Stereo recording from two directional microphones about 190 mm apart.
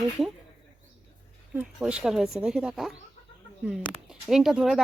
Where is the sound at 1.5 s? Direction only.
5° right (ahead or behind).